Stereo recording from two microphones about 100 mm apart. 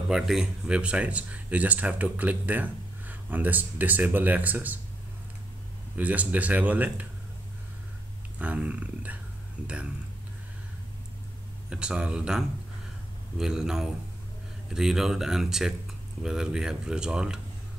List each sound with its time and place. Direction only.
0.1 s speech: centre (ahead or behind)
5.9 s speech: 15° right (ahead or behind)
8.4 s speech: 15° right (ahead or behind)
11.7 s speech: 10° right (ahead or behind)